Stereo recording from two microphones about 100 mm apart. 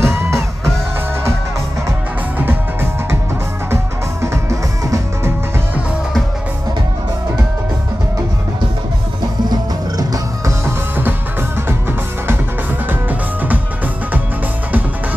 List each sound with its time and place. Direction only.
0.0 s music: 25° right (ahead or behind)
1.9 s music: 20° right (ahead or behind)
9.5 s music: 40° right (ahead or behind)
10.6 s music: 20° right (ahead or behind)
13.1 s music: 15° right (ahead or behind)